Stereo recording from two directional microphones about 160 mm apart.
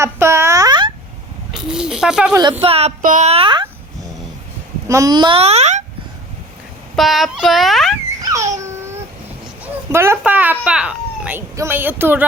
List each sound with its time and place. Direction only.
0.0 s a sound: 15° right (ahead or behind)
1.5 s speech: 5° right (ahead or behind)
2.3 s a child's voice: 30° right (ahead or behind)
3.0 s a child's voice: 50° right (ahead or behind); by 3.7 s 30° right (ahead or behind)
4.9 s a child's voice: 20° right (ahead or behind); by 5.8 s 45° right (ahead or behind)
6.9 s speech: centre (ahead or behind)
8.2 s a sound: 20° right (ahead or behind)
9.9 s a child's voice: 15° right (ahead or behind)